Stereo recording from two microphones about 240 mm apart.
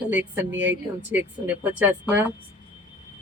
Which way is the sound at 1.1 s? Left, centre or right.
Centre.